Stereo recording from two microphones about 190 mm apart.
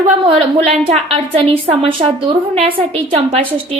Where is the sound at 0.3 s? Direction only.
30° right (ahead or behind).